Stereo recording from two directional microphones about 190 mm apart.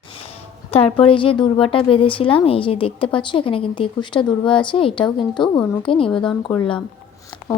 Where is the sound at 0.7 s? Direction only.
30° left (ahead or behind).